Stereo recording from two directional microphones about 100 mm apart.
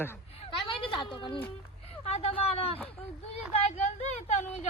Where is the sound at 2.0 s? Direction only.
80° left.